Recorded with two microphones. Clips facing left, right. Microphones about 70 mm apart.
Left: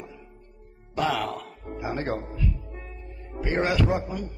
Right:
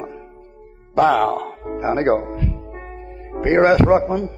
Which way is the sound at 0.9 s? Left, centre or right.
Right.